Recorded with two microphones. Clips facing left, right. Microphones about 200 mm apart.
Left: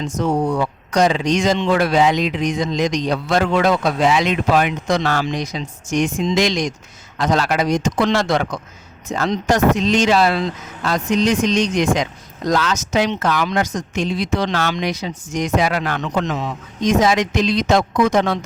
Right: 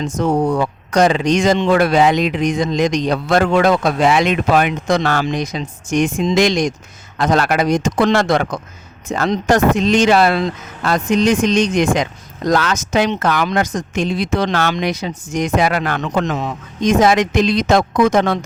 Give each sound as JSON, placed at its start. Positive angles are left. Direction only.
{"t": 0.0, "sound": "speech", "side_deg": -55}